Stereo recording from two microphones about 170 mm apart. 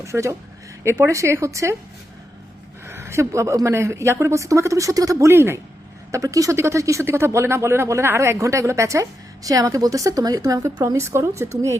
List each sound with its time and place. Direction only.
0.0 s speech: 15° right (ahead or behind)
2.8 s speech: 15° right (ahead or behind)